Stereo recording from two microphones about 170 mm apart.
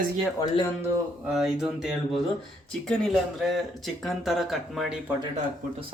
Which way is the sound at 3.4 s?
Centre (ahead or behind).